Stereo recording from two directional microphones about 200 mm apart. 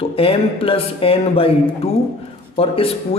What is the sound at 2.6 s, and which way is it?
Speech, 30° left (ahead or behind).